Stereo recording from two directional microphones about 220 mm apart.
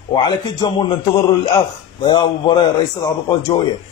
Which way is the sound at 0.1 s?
20° left (ahead or behind).